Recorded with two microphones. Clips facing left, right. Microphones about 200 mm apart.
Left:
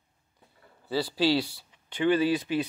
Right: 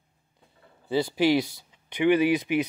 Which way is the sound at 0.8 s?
15° right (ahead or behind).